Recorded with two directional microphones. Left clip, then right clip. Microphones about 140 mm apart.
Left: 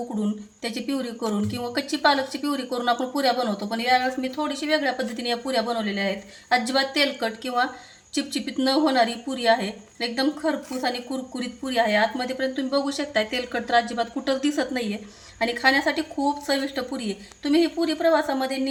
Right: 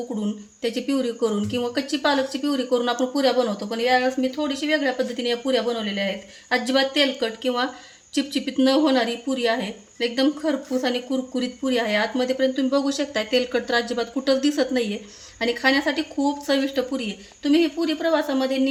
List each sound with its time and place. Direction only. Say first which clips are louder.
0.6 s speech: right 5 dB; 30° right (ahead or behind)